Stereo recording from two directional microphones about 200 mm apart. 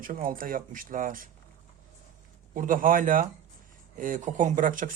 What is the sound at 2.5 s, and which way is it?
Speech, 40° right (ahead or behind).